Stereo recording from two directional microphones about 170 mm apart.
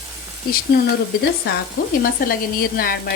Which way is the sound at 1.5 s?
70° left (ahead or behind).